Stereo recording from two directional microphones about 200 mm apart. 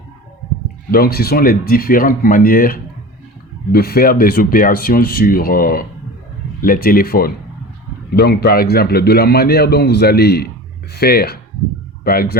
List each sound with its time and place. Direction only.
0.9 s a man's voice: 50° left (ahead or behind)